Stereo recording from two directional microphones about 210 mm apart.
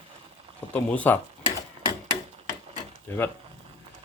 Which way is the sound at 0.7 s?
10° left (ahead or behind).